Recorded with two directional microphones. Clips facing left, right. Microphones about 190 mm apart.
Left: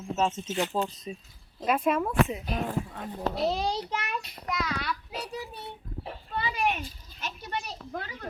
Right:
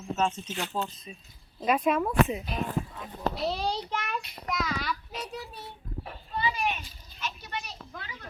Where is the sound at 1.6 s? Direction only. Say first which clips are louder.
Even; 5° left (ahead or behind).